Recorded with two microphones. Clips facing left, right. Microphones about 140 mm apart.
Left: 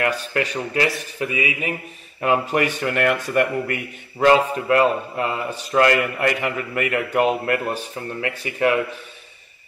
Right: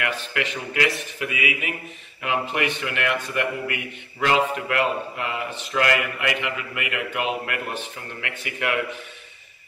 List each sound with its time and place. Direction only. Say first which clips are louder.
0.0 s a man's voice: left 5 dB; 35° left (ahead or behind)